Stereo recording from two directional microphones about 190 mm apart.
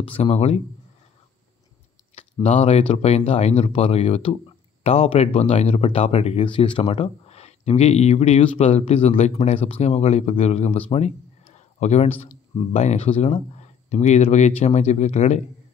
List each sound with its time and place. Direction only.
0.0 s speech: 30° left (ahead or behind)
2.4 s speech: 35° left (ahead or behind)